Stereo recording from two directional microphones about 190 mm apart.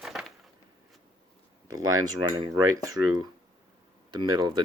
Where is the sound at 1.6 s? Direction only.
90° right.